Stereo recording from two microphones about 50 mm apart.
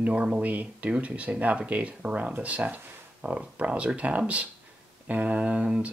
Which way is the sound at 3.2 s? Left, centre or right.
Right.